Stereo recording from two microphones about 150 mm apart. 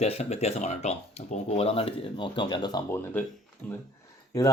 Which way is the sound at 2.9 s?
15° left (ahead or behind).